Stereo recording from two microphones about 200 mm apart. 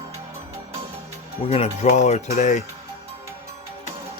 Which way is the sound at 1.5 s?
35° left (ahead or behind).